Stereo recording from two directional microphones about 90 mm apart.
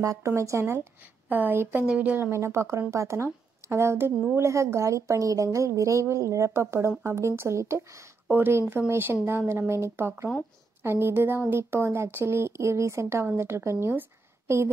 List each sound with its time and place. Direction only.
0.0 s a woman's voice: 40° right (ahead or behind); by 2.3 s 15° right (ahead or behind)
2.3 s a woman's voice: 30° right (ahead or behind)